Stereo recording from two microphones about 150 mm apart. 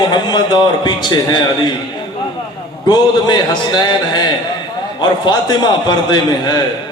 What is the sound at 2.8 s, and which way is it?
A man's voice, 30° left (ahead or behind).